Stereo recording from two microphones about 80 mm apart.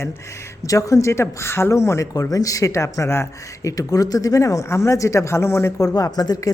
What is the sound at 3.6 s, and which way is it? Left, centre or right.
Speech, left.